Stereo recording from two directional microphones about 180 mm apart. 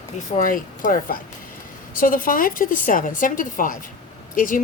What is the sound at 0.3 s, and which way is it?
A woman's voice, 45° left (ahead or behind).